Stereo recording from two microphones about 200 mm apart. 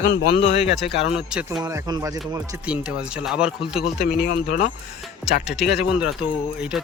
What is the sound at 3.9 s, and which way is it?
Speech, 45° left (ahead or behind).